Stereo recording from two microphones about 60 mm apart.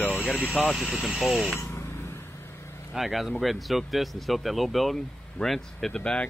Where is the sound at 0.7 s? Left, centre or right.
Centre.